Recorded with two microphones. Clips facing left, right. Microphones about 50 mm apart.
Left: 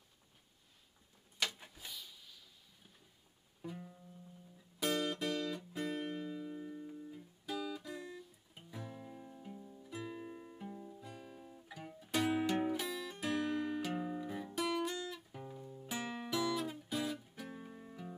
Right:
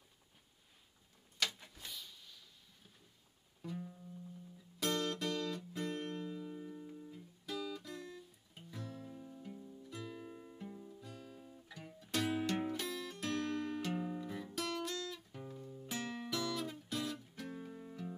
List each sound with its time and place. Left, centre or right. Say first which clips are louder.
1.6 s vehicle: even; centre
3.6 s music: right 2 dB; centre